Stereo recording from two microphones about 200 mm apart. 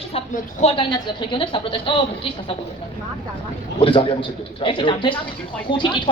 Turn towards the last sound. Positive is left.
turn(degrees=25)  # may be behind; listen again after turning